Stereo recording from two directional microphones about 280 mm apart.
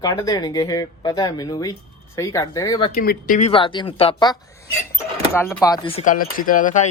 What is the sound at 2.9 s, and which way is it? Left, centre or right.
Speech, left.